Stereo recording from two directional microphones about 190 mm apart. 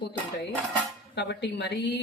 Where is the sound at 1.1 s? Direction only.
65° left (ahead or behind).